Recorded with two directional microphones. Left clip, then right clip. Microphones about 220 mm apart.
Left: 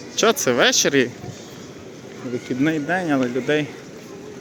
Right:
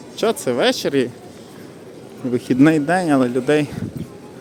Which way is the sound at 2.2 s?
40° right (ahead or behind).